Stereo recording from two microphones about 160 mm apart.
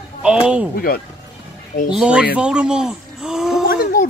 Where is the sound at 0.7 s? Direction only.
70° left (ahead or behind).